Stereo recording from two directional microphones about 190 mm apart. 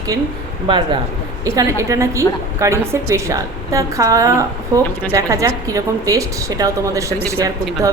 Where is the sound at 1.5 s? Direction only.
15° right (ahead or behind).